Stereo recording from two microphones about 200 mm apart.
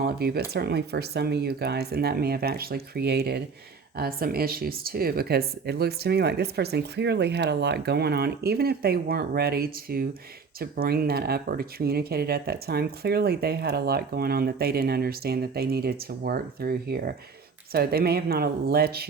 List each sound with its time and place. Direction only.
0.0 s speech: 50° right (ahead or behind)